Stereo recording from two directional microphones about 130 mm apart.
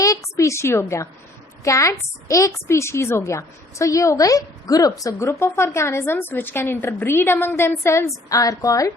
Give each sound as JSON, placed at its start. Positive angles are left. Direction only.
{"t": 0.0, "sound": "a woman's voice", "side_deg": 25}